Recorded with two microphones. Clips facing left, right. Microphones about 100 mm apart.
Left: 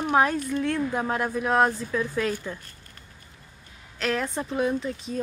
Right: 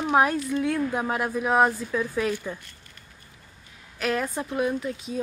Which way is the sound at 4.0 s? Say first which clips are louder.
Even; 5° right (ahead or behind).